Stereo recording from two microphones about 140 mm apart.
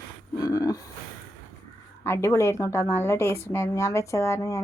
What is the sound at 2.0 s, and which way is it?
A woman's voice, 20° left (ahead or behind).